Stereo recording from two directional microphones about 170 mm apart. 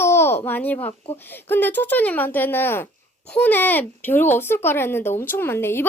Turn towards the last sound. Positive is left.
turn(degrees=15)  # may be behind; listen again after turning